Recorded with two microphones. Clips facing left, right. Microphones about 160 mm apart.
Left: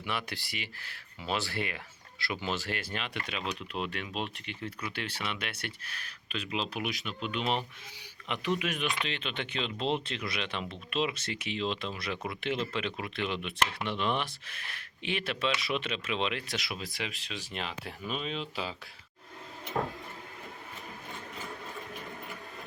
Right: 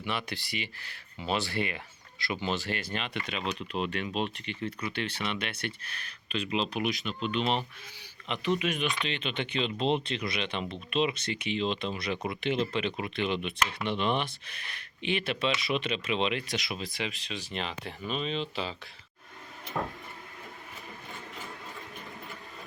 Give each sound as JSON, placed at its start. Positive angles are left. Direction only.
{"t": 0.0, "sound": "speech", "side_deg": 5}
{"t": 8.5, "sound": "speech", "side_deg": 5}